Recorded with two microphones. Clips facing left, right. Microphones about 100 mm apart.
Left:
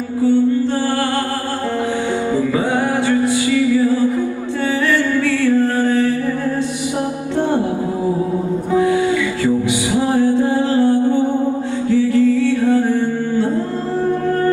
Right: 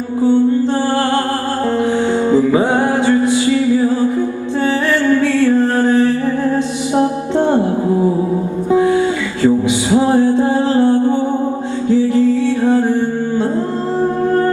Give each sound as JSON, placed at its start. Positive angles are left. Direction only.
{"t": 0.2, "sound": "music", "side_deg": -20}
{"t": 2.3, "sound": "music", "side_deg": -20}
{"t": 5.0, "sound": "music", "side_deg": -20}
{"t": 9.4, "sound": "music", "side_deg": -20}